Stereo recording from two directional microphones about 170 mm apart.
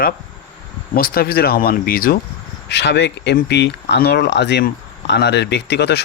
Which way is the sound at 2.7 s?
90° left.